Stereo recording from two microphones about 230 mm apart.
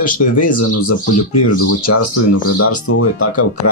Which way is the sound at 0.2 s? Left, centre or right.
Left.